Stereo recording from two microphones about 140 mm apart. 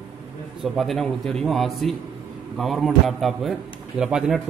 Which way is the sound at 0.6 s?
Centre (ahead or behind).